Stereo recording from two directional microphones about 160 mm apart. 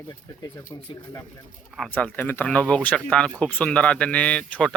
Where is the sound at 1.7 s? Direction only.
5° left (ahead or behind).